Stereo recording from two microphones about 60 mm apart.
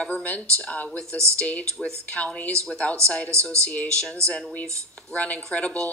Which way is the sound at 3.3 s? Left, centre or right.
Right.